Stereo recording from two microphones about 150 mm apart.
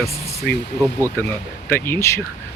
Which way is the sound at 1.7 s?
15° left (ahead or behind).